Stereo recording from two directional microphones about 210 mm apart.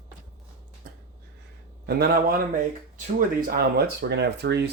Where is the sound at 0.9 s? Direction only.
45° right (ahead or behind).